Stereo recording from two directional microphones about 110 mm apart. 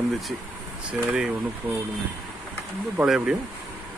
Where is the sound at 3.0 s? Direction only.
5° right (ahead or behind).